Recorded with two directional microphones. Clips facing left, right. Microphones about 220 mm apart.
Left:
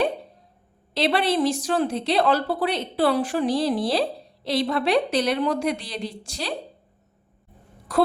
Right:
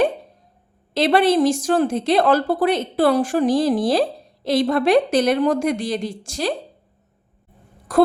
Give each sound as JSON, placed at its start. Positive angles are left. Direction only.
{"t": 0.9, "sound": "a woman's voice", "side_deg": -45}
{"t": 7.9, "sound": "speech", "side_deg": -50}